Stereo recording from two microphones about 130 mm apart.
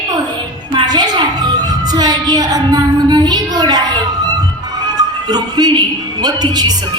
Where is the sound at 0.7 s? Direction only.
35° right (ahead or behind).